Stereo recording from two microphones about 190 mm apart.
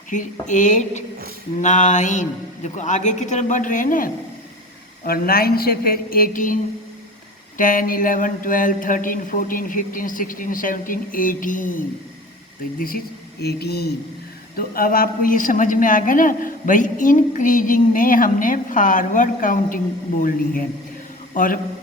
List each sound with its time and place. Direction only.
0.1 s a woman's voice: 40° left (ahead or behind)
13.4 s a woman's voice: 55° left (ahead or behind)